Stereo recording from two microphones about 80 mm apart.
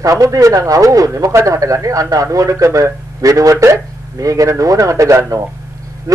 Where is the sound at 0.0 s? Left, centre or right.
Right.